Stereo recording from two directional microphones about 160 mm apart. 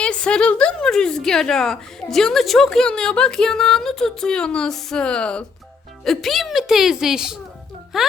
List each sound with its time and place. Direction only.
0.0 s a woman's voice: 5° left (ahead or behind)